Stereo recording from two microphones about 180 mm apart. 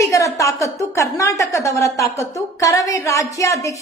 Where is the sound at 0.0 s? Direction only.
15° left (ahead or behind).